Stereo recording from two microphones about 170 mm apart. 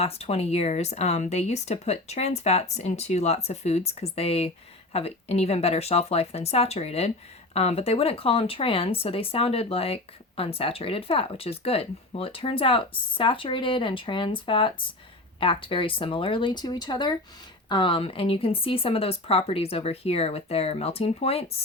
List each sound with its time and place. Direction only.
0.0 s speech: 35° left (ahead or behind)